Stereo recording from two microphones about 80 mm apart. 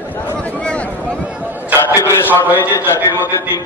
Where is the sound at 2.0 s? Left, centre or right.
Left.